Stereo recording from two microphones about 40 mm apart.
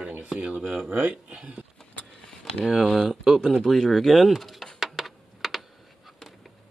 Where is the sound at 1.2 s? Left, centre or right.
Right.